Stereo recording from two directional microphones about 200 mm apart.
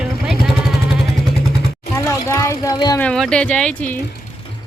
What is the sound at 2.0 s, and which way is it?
Speech, 15° left (ahead or behind).